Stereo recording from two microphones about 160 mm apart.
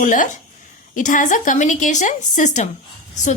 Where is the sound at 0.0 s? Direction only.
55° left (ahead or behind).